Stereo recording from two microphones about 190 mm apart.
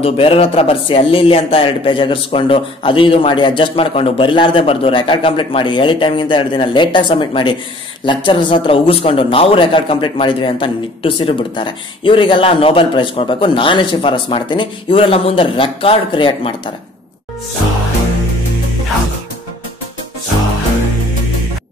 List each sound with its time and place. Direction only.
0.0 s speech: 30° left (ahead or behind)